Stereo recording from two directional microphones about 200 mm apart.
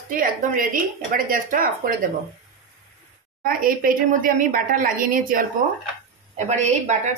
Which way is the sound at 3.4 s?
45° right (ahead or behind).